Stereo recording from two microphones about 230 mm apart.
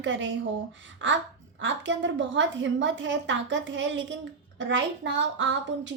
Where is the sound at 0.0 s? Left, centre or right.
Right.